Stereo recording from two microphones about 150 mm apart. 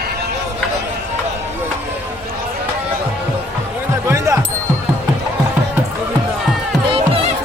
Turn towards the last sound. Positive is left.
turn(degrees=-40)  # may be behind; listen again after turning